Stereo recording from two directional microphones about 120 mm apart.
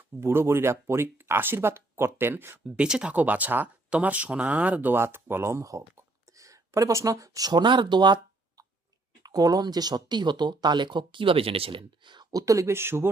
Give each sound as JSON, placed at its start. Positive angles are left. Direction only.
{"t": 0.2, "sound": "speech", "side_deg": -20}
{"t": 2.6, "sound": "speech", "side_deg": -10}